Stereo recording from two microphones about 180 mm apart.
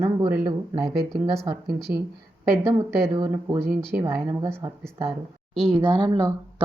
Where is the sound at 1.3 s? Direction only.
10° right (ahead or behind).